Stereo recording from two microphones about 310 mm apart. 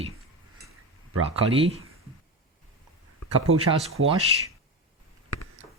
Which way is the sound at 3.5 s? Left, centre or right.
Right.